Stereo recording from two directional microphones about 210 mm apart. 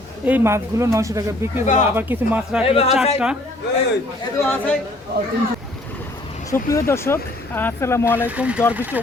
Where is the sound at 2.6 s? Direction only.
25° left (ahead or behind).